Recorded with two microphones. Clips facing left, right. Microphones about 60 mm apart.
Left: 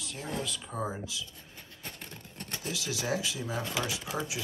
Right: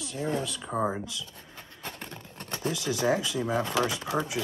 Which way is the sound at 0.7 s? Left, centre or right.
Right.